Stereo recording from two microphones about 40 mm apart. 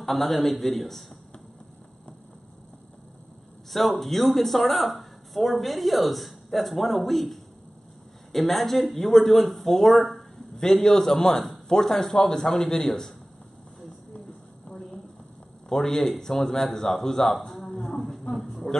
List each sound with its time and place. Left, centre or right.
0.0 s speech: centre
4.0 s speech: centre
10.1 s a man's voice: centre
15.7 s speech: centre
18.3 s a sound: centre